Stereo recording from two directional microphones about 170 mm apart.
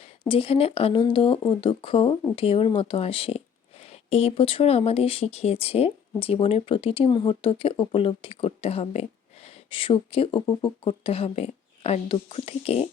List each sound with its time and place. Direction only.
0.3 s speech: 35° left (ahead or behind)